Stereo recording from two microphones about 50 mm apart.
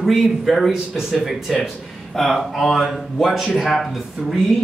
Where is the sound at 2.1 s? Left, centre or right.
Centre.